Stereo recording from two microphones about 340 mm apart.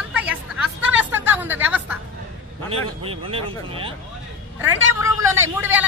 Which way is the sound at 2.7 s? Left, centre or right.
Centre.